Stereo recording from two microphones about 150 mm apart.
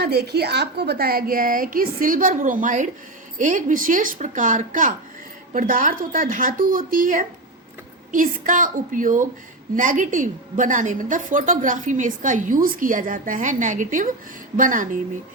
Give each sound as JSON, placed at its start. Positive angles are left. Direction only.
{"t": 0.0, "sound": "a woman's voice", "side_deg": -90}